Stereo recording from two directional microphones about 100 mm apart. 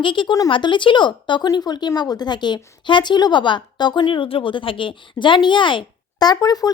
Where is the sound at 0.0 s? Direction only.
55° left (ahead or behind).